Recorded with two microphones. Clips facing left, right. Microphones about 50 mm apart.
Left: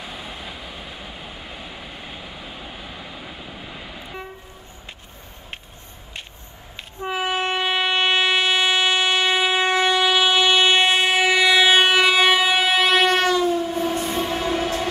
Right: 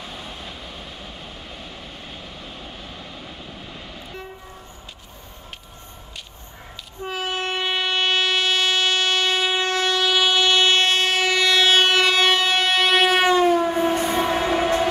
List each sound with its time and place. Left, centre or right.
0.0 s vehicle: centre
7.0 s train: centre
13.5 s train: right
13.7 s train: right